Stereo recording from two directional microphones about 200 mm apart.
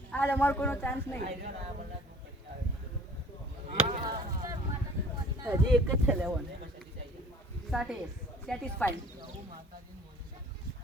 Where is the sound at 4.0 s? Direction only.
20° right (ahead or behind).